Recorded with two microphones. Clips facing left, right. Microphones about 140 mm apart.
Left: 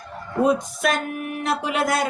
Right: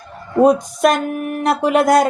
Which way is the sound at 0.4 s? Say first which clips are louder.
Right 7 dB; 45° right (ahead or behind).